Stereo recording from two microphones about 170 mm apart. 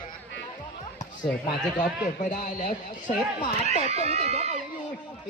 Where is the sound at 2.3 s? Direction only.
50° left (ahead or behind).